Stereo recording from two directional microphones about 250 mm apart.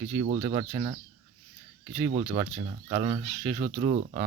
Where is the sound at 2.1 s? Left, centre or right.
Right.